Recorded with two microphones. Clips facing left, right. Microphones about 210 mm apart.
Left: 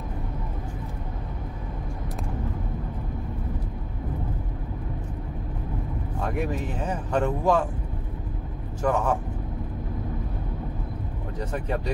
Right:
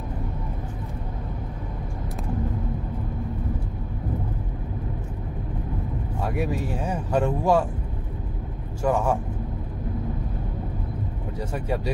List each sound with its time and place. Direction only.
6.2 s speech: 10° right (ahead or behind)
8.8 s speech: 10° right (ahead or behind)
11.3 s speech: 10° right (ahead or behind)